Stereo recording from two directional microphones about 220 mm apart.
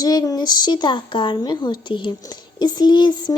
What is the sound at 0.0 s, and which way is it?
Speech, 15° left (ahead or behind).